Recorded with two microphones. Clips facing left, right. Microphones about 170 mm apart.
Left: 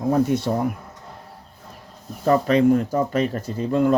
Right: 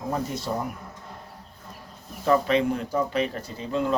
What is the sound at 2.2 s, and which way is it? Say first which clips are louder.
Speech: left 5 dB; 40° left (ahead or behind).